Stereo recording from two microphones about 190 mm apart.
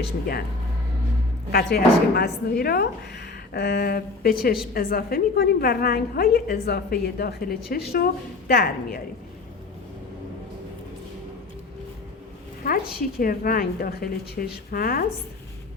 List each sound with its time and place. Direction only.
0.0 s a woman's voice: 55° left (ahead or behind)
1.5 s a woman's voice: 55° left (ahead or behind)
12.6 s a woman's voice: 50° left (ahead or behind)